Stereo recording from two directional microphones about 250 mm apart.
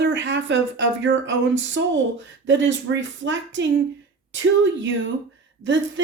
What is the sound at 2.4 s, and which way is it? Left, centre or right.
A woman's voice, right.